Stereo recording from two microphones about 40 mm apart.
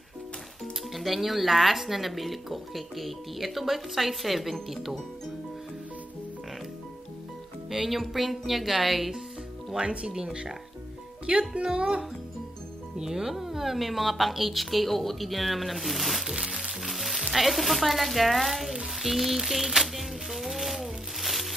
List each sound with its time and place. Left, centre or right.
0.9 s speech: centre
7.7 s speech: centre
9.8 s speech: right
12.9 s speech: centre
16.3 s music: centre
16.8 s music: centre
17.3 s speech: centre
18.9 s a sound: centre